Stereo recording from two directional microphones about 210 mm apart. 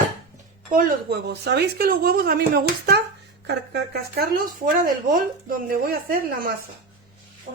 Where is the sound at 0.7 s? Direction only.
45° right (ahead or behind).